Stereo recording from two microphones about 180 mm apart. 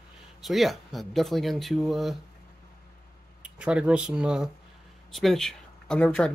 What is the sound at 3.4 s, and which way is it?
Speech, 5° right (ahead or behind).